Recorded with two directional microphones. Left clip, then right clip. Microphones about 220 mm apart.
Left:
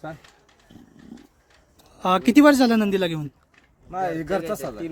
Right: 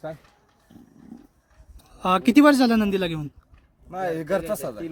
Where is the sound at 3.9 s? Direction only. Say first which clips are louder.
Even; 25° right (ahead or behind).